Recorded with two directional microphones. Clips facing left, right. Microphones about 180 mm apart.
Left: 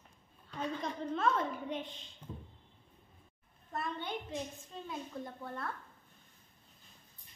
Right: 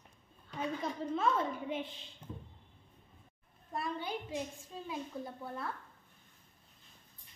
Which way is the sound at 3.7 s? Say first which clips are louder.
Right 1 dB; 5° right (ahead or behind).